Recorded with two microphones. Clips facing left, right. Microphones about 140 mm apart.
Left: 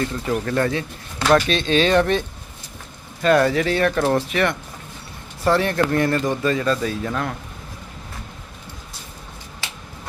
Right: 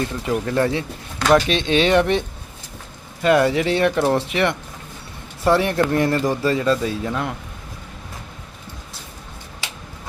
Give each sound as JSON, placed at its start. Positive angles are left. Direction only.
{"t": 0.3, "sound": "speech", "side_deg": -20}